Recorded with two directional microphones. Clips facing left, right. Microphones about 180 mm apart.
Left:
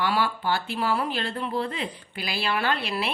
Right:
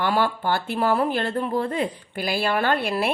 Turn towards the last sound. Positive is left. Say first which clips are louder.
# right 5 dB
turn(degrees=-50)  # may be behind; listen again after turning